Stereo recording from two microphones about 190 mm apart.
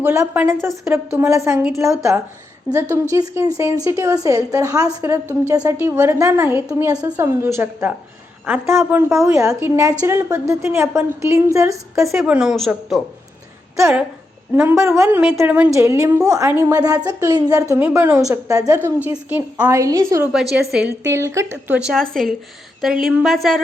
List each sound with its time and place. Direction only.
0.0 s a woman's voice: 10° right (ahead or behind)
2.9 s a woman's voice: 15° right (ahead or behind)
12.0 s a woman's voice: 5° right (ahead or behind)
13.7 s a woman's voice: 15° right (ahead or behind)
20.3 s a woman's voice: centre (ahead or behind)
21.0 s a woman's voice: 15° right (ahead or behind); by 23.6 s centre (ahead or behind)